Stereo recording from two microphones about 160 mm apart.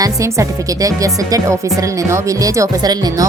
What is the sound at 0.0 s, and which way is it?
Speech, 20° right (ahead or behind).